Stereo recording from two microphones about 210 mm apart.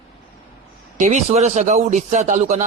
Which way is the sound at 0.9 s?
35° right (ahead or behind).